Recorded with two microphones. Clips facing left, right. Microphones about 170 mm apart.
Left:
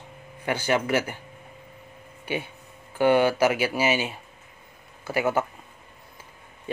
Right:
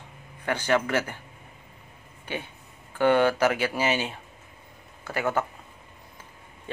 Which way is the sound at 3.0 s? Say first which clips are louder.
Left 1 dB; 10° left (ahead or behind).